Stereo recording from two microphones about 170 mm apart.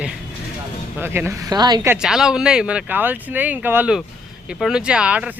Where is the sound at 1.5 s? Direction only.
25° right (ahead or behind).